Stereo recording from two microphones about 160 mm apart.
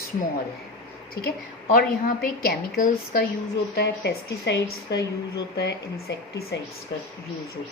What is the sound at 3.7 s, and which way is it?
Speech, 90° left.